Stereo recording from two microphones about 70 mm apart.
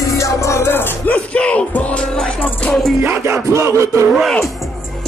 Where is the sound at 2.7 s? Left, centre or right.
Centre.